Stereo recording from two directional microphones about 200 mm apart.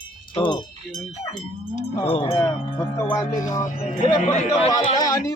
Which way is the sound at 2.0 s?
25° left (ahead or behind).